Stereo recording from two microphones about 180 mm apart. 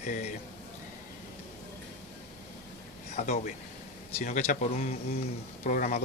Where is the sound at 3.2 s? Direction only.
45° left (ahead or behind).